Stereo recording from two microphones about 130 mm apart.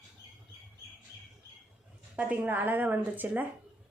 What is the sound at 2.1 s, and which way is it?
Speech, 10° right (ahead or behind).